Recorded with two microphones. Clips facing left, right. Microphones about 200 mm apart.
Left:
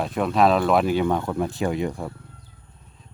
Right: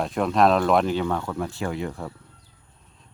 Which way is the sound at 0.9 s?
15° left (ahead or behind).